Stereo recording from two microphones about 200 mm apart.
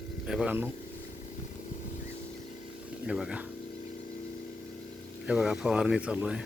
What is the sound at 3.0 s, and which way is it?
Speech, 5° right (ahead or behind).